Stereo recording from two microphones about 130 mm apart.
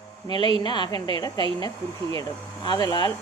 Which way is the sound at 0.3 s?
35° left (ahead or behind).